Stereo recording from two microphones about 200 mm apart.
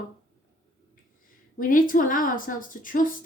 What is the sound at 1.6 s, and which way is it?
A woman's voice, 45° left (ahead or behind).